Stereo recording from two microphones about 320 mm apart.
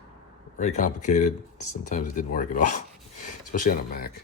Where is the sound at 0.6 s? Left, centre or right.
Left.